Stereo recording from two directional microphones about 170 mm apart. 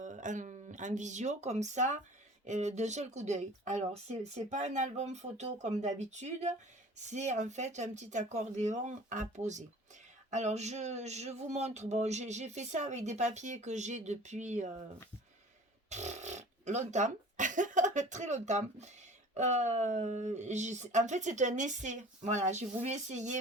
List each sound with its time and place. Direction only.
0.0 s speech: 45° right (ahead or behind)
15.9 s speech: 40° right (ahead or behind)